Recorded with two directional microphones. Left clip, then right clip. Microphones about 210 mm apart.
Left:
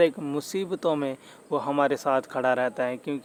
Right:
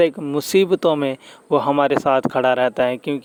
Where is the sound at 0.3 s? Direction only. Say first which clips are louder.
Right 13 dB; 40° right (ahead or behind).